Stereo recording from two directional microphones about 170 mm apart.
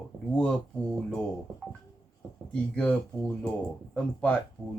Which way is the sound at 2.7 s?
5° left (ahead or behind).